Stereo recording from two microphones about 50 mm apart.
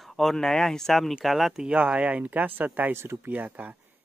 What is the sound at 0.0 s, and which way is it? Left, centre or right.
Speech, centre.